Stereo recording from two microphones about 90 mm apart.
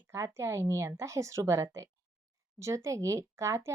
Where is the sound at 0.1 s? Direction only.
30° right (ahead or behind).